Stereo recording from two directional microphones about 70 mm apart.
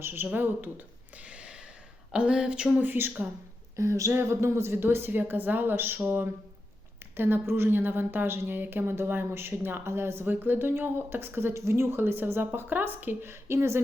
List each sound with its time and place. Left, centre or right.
0.0 s a woman's voice: right
1.2 s gasp: centre
2.1 s a sound: centre
2.7 s speech: right
3.8 s a woman's voice: right
7.2 s a woman's voice: right